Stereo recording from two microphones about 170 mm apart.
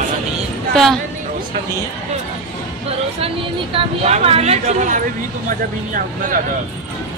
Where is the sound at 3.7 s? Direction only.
35° right (ahead or behind).